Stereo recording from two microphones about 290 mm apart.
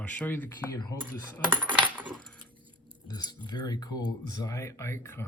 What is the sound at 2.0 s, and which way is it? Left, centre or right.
Coin, centre.